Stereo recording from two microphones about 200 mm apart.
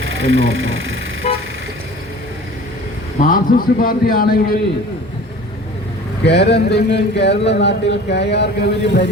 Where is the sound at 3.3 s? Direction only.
45° left (ahead or behind).